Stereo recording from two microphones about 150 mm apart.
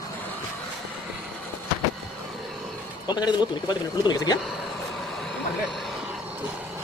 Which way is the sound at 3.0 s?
30° left (ahead or behind).